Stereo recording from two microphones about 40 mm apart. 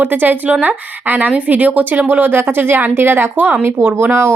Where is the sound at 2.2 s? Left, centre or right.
Right.